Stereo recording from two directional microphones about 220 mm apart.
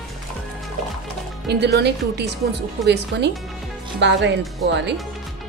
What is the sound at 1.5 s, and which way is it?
A woman's voice, 50° right (ahead or behind).